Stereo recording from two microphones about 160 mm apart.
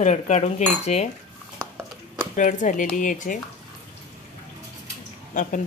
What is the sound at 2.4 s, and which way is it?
Speech, 50° left (ahead or behind).